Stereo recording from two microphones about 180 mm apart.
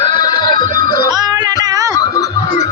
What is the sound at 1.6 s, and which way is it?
Snicker, 20° right (ahead or behind).